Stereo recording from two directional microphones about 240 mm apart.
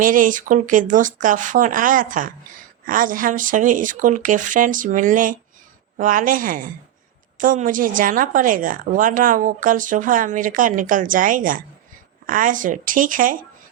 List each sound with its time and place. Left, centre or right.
0.0 s a woman's voice: right